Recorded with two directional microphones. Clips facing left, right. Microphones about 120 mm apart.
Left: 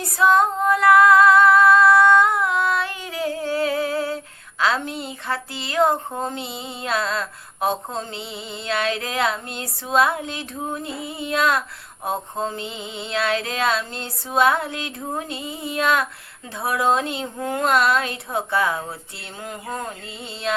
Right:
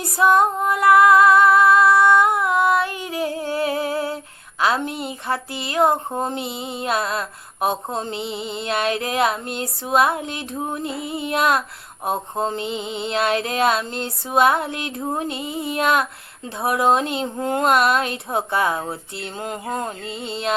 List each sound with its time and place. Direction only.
0.2 s female singing: 15° right (ahead or behind)
4.6 s speech: 15° right (ahead or behind)
12.0 s a sound: 20° right (ahead or behind)